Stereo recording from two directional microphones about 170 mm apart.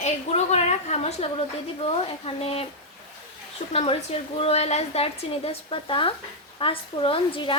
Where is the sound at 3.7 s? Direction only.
35° left (ahead or behind).